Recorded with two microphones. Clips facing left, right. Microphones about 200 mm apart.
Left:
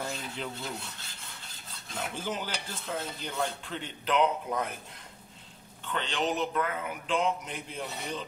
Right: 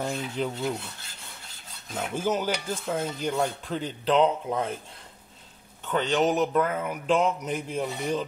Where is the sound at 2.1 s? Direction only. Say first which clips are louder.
Right 11 dB; 45° right (ahead or behind).